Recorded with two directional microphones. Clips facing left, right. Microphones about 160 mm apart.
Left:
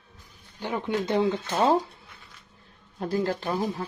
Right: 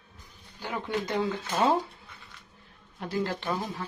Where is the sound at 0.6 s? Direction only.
20° left (ahead or behind).